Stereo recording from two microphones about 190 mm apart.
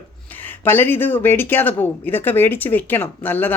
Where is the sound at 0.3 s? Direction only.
10° left (ahead or behind).